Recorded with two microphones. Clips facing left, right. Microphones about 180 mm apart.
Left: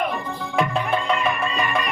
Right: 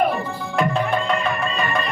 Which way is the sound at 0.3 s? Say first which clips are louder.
Right 1 dB; centre (ahead or behind).